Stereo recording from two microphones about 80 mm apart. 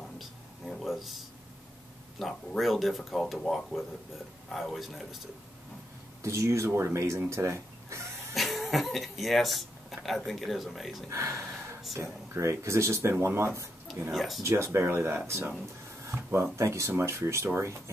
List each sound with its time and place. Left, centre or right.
0.2 s a sound: centre
2.1 s speech: centre
6.2 s speech: right
8.4 s speech: centre
11.1 s speech: right
14.1 s speech: centre
14.4 s speech: right
16.5 s speech: right